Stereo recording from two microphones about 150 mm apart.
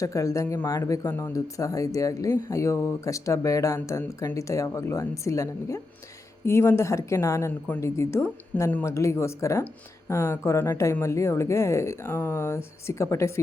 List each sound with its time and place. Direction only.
0.0 s speech: 20° left (ahead or behind)